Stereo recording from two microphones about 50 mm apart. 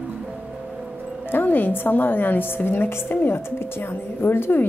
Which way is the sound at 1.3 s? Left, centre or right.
Left.